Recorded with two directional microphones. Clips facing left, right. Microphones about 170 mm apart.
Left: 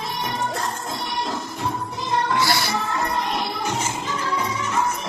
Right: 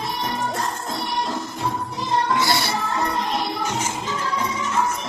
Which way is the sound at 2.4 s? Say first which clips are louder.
Even; 20° right (ahead or behind).